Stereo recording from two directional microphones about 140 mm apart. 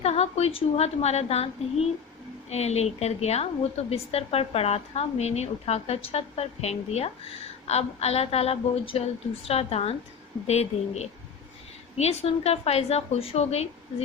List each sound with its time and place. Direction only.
0.0 s a woman's voice: 50° left (ahead or behind)